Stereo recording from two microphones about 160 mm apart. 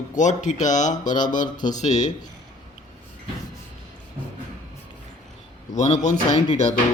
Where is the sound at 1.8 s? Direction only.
45° left (ahead or behind).